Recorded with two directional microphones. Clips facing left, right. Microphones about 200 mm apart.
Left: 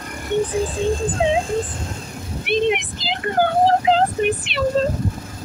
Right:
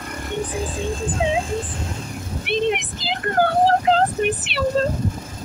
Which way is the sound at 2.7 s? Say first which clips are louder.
Left 2 dB; 5° left (ahead or behind).